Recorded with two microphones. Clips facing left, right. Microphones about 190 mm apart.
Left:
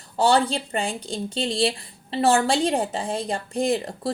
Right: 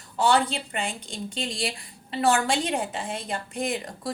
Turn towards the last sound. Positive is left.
turn(degrees=30)  # may be behind; listen again after turning